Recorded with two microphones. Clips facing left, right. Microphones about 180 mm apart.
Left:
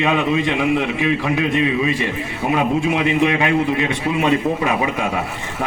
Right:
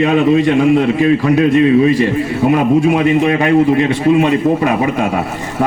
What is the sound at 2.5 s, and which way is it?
A man's voice, 40° right (ahead or behind).